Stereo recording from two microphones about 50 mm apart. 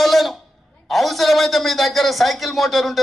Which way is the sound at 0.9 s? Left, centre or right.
Centre.